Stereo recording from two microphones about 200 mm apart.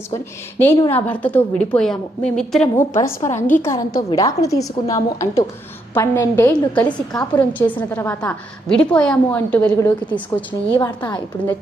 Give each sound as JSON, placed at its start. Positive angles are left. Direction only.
{"t": 0.9, "sound": "a woman's voice", "side_deg": 5}
{"t": 10.8, "sound": "a woman's voice", "side_deg": 20}